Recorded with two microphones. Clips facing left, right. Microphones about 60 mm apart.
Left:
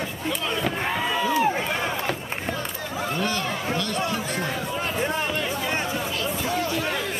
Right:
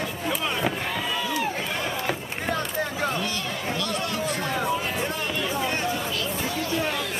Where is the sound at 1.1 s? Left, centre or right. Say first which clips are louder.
Left 6 dB; left.